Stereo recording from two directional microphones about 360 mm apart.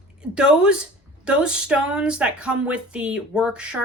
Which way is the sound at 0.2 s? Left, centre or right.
Centre.